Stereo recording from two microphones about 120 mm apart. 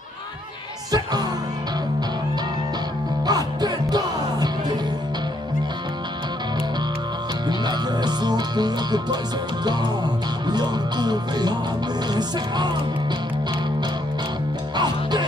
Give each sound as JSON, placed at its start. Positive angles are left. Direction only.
{"t": 3.3, "sound": "music", "side_deg": -35}
{"t": 7.4, "sound": "music", "side_deg": -35}
{"t": 10.4, "sound": "music", "side_deg": -35}
{"t": 14.8, "sound": "music", "side_deg": -35}